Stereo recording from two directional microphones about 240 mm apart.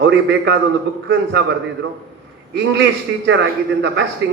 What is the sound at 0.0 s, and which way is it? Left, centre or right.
A man's voice, right.